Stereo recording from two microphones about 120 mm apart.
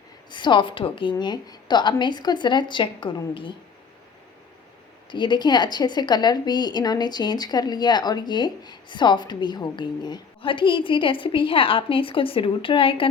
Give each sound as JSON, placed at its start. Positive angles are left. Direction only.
{"t": 0.3, "sound": "a woman's voice", "side_deg": 40}
{"t": 5.1, "sound": "a woman's voice", "side_deg": 40}